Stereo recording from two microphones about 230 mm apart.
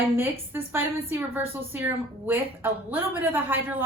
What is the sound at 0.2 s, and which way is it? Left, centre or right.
A woman's voice, centre.